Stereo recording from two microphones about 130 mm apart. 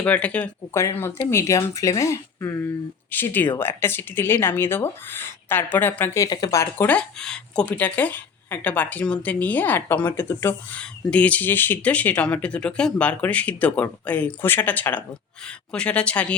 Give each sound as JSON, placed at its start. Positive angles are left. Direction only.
{"t": 0.0, "sound": "speech", "side_deg": 10}
{"t": 0.7, "sound": "speech", "side_deg": 20}
{"t": 6.2, "sound": "speech", "side_deg": 30}